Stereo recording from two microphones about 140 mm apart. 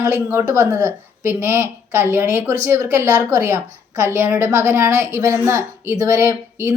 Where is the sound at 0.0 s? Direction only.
15° right (ahead or behind).